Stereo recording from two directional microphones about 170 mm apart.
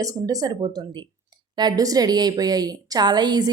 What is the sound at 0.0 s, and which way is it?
A woman's voice, 20° right (ahead or behind).